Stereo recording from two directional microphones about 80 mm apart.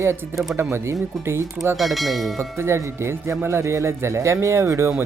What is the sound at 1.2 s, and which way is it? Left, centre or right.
Speech, right.